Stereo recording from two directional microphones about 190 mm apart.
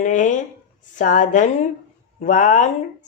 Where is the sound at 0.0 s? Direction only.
40° left (ahead or behind).